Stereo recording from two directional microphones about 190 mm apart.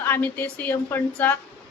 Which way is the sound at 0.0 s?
10° left (ahead or behind).